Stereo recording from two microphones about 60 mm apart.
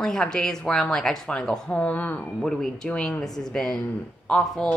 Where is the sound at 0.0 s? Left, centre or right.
Centre; by 2.1 s left.